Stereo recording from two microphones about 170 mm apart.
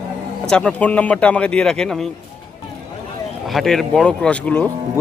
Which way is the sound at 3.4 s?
Centre (ahead or behind).